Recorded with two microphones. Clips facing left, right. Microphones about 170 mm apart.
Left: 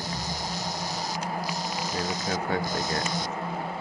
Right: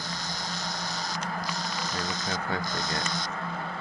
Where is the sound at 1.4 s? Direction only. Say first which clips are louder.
Left 2 dB; 10° left (ahead or behind).